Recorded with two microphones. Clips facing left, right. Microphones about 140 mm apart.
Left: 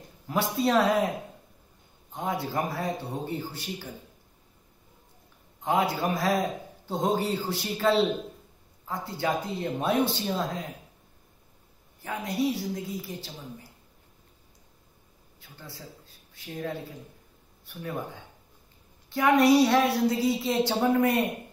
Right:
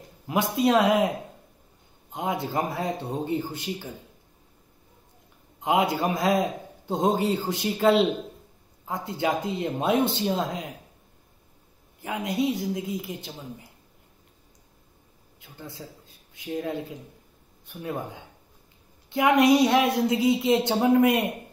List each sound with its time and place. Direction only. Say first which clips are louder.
0.3 s a man's voice: right 3 dB; 15° right (ahead or behind)
2.1 s a woman's voice: right 2 dB; 20° right (ahead or behind)
5.6 s a man's voice: right 3 dB; 20° right (ahead or behind)
12.0 s a woman's voice: right 2 dB; 20° right (ahead or behind)
15.4 s a woman's voice: right 4 dB; 20° right (ahead or behind)